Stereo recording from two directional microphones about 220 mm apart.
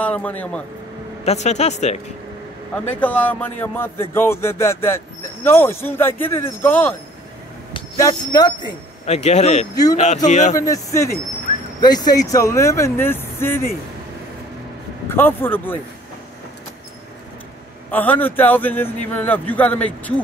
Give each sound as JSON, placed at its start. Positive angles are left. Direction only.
{"t": 0.0, "sound": "speech", "side_deg": 5}
{"t": 1.2, "sound": "speech", "side_deg": 30}
{"t": 2.9, "sound": "speech", "side_deg": 5}
{"t": 7.7, "sound": "speech", "side_deg": 25}
{"t": 10.6, "sound": "speech", "side_deg": 15}
{"t": 15.0, "sound": "speech", "side_deg": 10}
{"t": 17.9, "sound": "speech", "side_deg": 10}